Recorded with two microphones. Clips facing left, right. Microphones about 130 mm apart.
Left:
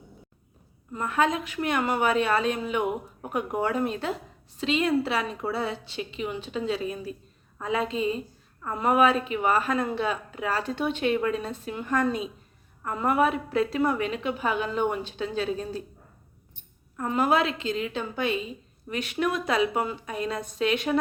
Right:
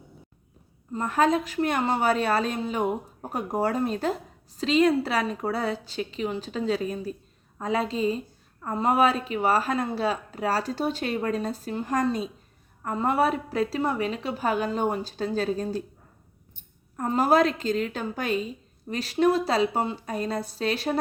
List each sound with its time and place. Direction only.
0.9 s speech: 35° right (ahead or behind)
17.0 s speech: 35° right (ahead or behind)